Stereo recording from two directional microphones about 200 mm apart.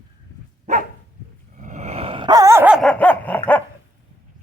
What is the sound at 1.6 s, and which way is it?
Dog, 35° right (ahead or behind).